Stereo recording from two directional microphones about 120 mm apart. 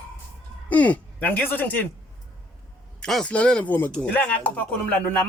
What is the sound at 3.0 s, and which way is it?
Speech, 5° left (ahead or behind).